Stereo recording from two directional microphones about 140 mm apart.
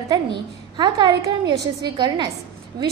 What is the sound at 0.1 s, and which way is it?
A woman's voice, 30° right (ahead or behind).